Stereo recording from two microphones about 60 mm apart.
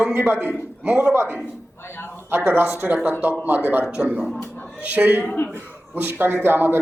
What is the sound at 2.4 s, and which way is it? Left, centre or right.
A man's voice, right.